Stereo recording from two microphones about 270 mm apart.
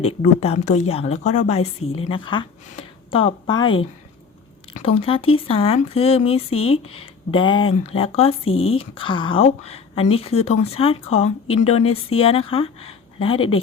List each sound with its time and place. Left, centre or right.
0.0 s speech: left
4.8 s speech: left
6.5 s speech: left
6.9 s speech: centre
8.4 s speech: left
8.7 s speech: centre
11.8 s speech: left
12.2 s speech: left